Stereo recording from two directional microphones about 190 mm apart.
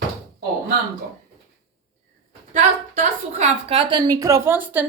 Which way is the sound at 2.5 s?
35° right (ahead or behind).